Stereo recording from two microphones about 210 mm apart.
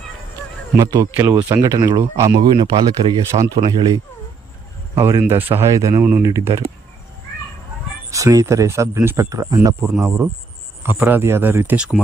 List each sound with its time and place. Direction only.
0.8 s speech: 15° right (ahead or behind)
8.1 s speech: 15° right (ahead or behind)